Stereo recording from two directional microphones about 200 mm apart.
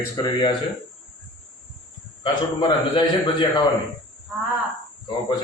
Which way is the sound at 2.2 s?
25° left (ahead or behind).